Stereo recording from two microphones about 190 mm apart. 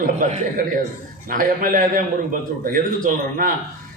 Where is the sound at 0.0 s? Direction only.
40° right (ahead or behind).